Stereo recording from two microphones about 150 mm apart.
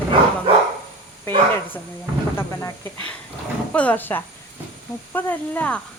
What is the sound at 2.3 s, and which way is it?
Speech, 15° left (ahead or behind).